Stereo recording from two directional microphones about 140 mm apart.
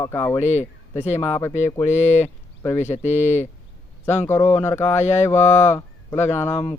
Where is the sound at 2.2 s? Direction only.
15° left (ahead or behind).